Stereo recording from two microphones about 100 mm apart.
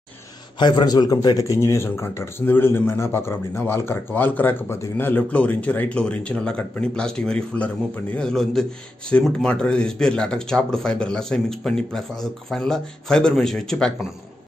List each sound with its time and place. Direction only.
0.6 s speech: 45° left (ahead or behind); by 13.9 s 5° left (ahead or behind)